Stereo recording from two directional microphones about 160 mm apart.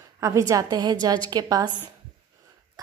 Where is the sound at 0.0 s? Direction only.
20° right (ahead or behind).